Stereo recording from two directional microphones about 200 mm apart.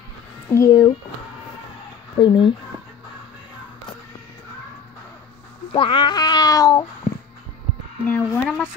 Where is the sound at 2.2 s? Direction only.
25° left (ahead or behind).